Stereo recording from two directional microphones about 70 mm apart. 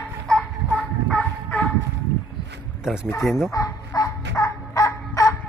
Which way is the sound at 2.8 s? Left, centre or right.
Centre.